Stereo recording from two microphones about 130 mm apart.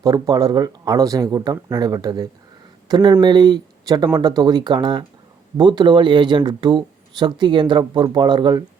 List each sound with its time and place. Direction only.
0.0 s speech: 30° right (ahead or behind)